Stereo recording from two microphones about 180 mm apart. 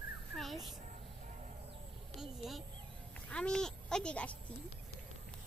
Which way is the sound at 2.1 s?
Centre (ahead or behind).